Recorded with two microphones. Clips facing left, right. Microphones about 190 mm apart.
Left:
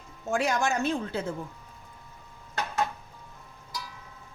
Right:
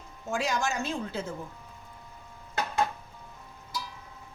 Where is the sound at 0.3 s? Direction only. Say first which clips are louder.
Left 3 dB; 60° left (ahead or behind).